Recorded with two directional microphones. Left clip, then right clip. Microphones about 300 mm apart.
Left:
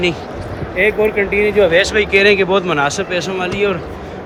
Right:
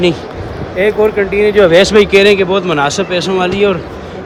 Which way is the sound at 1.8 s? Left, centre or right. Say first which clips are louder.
Right 5 dB; centre.